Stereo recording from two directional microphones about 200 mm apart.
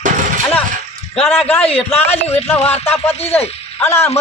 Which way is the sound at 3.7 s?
10° left (ahead or behind).